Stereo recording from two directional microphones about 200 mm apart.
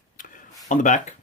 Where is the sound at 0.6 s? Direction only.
40° left (ahead or behind).